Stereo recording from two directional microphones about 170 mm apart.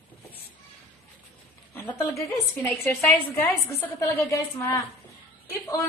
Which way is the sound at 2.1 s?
10° left (ahead or behind).